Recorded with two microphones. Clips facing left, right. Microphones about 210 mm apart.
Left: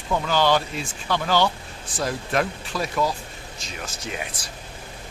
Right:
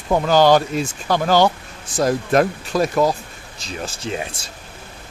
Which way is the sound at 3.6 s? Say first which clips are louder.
Right 7 dB; 30° right (ahead or behind).